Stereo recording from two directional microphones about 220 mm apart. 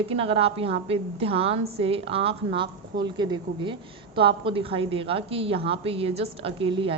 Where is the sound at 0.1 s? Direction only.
25° right (ahead or behind).